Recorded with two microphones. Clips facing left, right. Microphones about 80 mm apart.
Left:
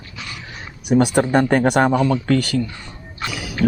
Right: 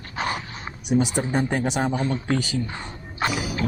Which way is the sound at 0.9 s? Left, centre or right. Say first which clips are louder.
Left 7 dB; left.